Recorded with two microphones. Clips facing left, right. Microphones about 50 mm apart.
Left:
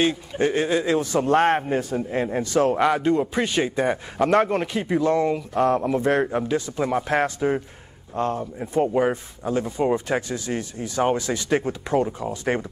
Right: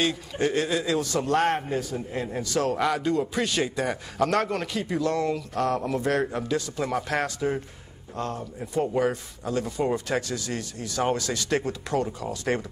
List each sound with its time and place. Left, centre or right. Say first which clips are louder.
0.0 s speech: left 4 dB; centre